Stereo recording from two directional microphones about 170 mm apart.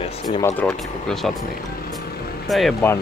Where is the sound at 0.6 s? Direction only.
5° left (ahead or behind).